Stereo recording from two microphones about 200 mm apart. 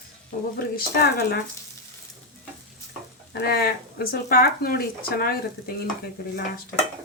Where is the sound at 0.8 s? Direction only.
50° left (ahead or behind).